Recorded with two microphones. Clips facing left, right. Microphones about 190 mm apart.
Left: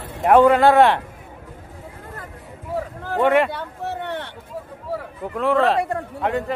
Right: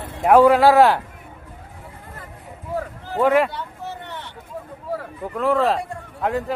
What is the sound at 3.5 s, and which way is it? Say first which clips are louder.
Vehicle: left 4 dB; 60° left (ahead or behind).